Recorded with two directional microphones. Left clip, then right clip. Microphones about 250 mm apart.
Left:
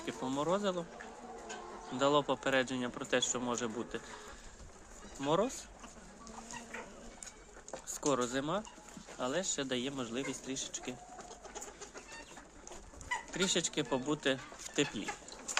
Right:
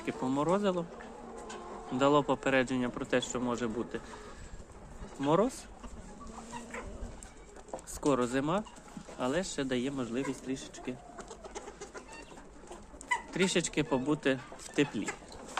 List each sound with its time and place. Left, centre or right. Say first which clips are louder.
0.0 s speech: right 4 dB; centre
1.9 s speech: right 3 dB; centre
5.2 s speech: right 4 dB; centre
8.0 s speech: right 4 dB; centre
11.3 s chicken: right 5 dB; right
13.3 s speech: right 2 dB; centre